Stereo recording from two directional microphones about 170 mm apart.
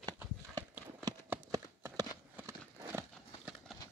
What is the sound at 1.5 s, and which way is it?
Clip-clop, 20° right (ahead or behind).